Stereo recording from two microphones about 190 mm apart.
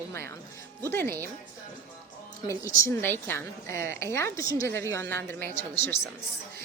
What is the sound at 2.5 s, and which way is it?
Speech, 15° left (ahead or behind).